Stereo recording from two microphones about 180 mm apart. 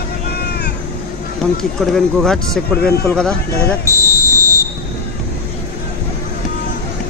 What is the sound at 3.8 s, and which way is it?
Fire alarm, 15° left (ahead or behind).